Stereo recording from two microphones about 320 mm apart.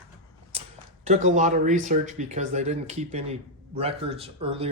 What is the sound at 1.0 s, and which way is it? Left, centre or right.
Speech, right.